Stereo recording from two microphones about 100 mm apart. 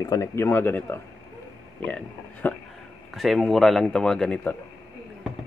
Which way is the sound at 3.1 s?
Centre (ahead or behind).